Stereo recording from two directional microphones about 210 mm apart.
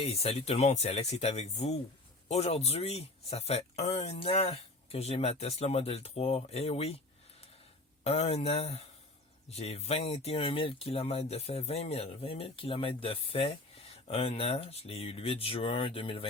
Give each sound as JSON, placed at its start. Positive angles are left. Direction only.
{"t": 0.0, "sound": "speech", "side_deg": 30}
{"t": 8.0, "sound": "speech", "side_deg": 30}